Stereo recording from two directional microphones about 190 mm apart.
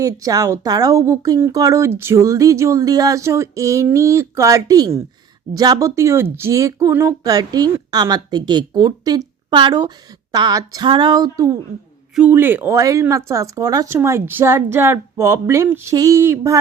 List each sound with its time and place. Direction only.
0.0 s speech: 20° right (ahead or behind)
12.1 s speech: 10° right (ahead or behind)